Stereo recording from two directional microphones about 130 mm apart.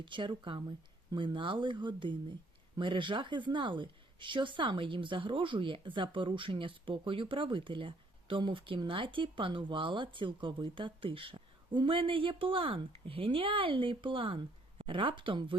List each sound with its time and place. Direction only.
0.0 s a woman's voice: 40° right (ahead or behind)